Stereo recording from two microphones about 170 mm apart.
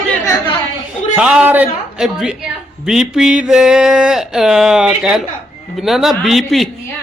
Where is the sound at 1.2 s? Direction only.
5° right (ahead or behind).